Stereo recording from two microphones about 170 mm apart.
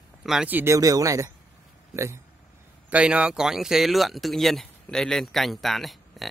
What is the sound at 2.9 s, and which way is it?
Speech, 5° right (ahead or behind).